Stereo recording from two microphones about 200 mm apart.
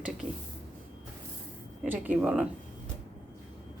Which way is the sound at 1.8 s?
10° right (ahead or behind).